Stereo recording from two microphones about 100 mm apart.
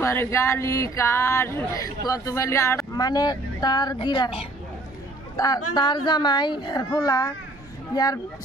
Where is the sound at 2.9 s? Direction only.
40° left (ahead or behind).